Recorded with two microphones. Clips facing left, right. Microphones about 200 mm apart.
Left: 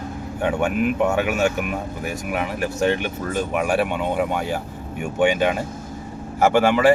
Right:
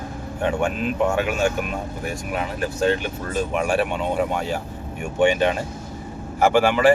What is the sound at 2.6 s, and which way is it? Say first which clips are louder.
Speech: right 1 dB; 20° left (ahead or behind).